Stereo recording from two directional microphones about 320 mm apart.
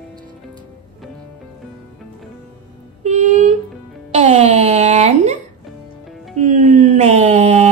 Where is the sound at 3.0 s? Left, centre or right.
Right.